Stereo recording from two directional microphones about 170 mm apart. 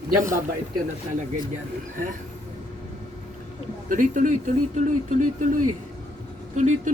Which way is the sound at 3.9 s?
50° right (ahead or behind).